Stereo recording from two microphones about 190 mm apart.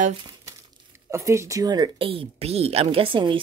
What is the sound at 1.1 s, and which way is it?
Speech, 15° right (ahead or behind).